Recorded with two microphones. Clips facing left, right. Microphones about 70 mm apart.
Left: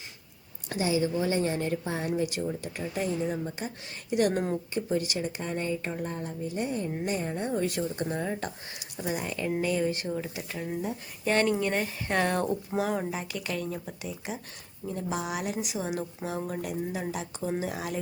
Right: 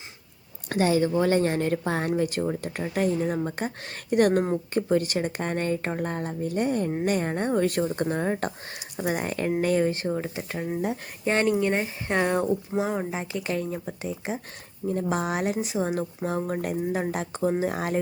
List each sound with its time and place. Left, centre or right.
0.7 s speech: right
14.8 s speech: right